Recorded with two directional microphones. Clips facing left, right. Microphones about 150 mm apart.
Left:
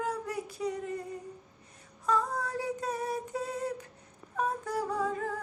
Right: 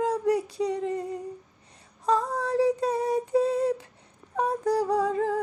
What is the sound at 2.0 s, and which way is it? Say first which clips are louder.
Female singing: right 5 dB; 35° right (ahead or behind).